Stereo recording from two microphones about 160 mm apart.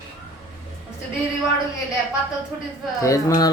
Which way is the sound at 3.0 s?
20° left (ahead or behind).